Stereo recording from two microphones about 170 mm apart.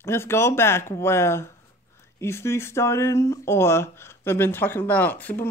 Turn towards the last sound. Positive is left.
turn(degrees=10)  # may be behind; listen again after turning